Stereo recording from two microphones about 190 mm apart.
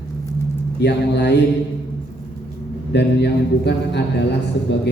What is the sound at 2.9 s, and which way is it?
A man's voice, 65° left (ahead or behind).